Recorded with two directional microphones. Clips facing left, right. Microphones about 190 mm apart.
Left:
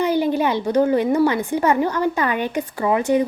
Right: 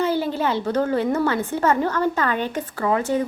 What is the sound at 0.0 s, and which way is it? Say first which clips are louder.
A woman's voice: left 3 dB; 15° left (ahead or behind).